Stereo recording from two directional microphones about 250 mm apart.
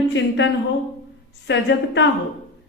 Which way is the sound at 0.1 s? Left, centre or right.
Left.